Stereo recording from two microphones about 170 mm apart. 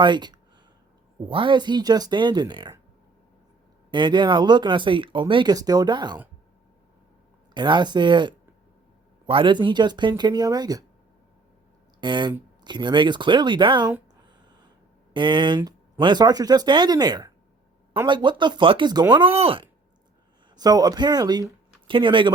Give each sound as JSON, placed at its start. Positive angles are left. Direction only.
{"t": 0.0, "sound": "speech", "side_deg": -25}
{"t": 3.9, "sound": "speech", "side_deg": -25}
{"t": 7.5, "sound": "speech", "side_deg": -25}
{"t": 11.9, "sound": "speech", "side_deg": -25}
{"t": 15.1, "sound": "speech", "side_deg": -30}
{"t": 20.6, "sound": "speech", "side_deg": -20}